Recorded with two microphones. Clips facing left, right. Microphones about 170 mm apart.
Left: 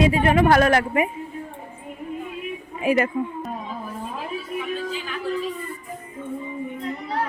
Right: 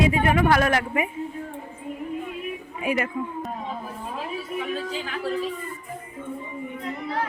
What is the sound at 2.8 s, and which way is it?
Speech, 35° left (ahead or behind).